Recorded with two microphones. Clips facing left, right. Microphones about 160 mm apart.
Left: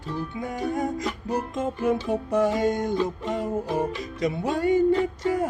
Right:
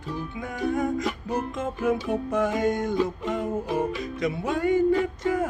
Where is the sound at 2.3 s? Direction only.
35° left (ahead or behind).